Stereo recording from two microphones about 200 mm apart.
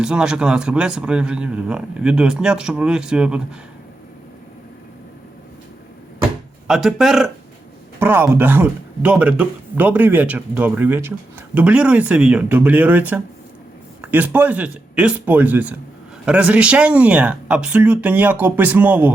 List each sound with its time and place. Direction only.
0.0 s speech: 5° right (ahead or behind)
6.7 s a man's voice: centre (ahead or behind)